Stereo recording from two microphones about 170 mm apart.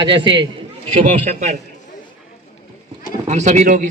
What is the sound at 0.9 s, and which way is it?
Speech, 45° right (ahead or behind).